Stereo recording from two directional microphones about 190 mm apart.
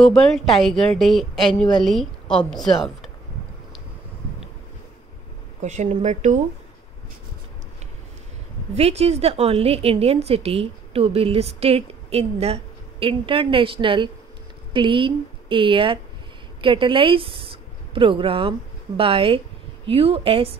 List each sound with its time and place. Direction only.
0.0 s a woman's voice: 5° left (ahead or behind)
5.6 s a woman's voice: 35° right (ahead or behind)
8.7 s a woman's voice: 35° right (ahead or behind)